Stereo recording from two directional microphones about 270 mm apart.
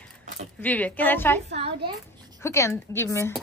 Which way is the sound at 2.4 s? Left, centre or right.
Centre.